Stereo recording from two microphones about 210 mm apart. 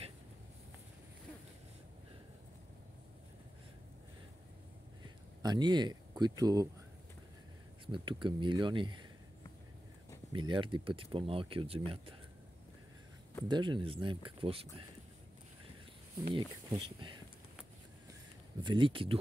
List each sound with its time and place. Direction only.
5.0 s a sound: 20° right (ahead or behind)
7.8 s speech: 25° right (ahead or behind)
10.3 s speech: 25° right (ahead or behind)
13.5 s speech: 20° right (ahead or behind)
16.3 s speech: 20° right (ahead or behind)
18.6 s speech: 20° right (ahead or behind)